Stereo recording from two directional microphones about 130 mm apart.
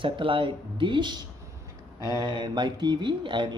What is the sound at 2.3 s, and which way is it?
Speech, 35° right (ahead or behind).